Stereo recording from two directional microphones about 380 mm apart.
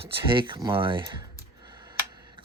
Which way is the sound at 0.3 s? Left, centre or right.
Centre.